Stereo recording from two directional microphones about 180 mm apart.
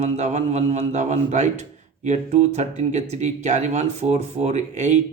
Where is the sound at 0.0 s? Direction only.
40° right (ahead or behind).